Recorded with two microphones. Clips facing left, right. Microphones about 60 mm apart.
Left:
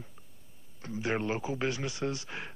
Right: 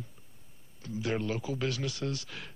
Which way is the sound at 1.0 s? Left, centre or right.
Left.